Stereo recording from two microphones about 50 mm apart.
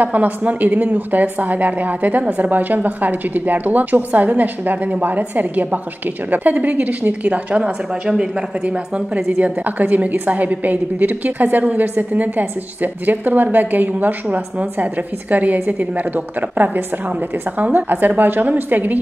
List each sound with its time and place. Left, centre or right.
0.0 s a woman's voice: right